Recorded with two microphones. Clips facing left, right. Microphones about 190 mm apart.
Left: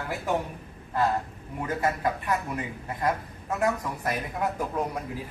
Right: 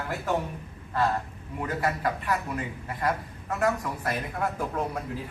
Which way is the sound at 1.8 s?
25° left (ahead or behind).